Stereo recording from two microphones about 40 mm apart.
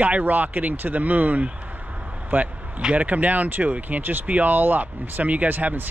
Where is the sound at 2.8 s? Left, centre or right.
Right.